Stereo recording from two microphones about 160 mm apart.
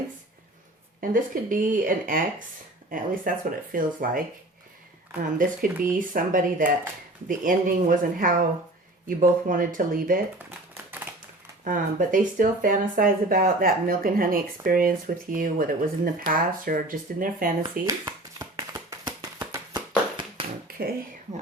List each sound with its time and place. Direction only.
1.1 s speech: 55° right (ahead or behind)
5.4 s speech: 60° right (ahead or behind)
11.6 s speech: 55° right (ahead or behind)
17.8 s a sound: 20° right (ahead or behind)
20.7 s finger snapping: 70° right (ahead or behind)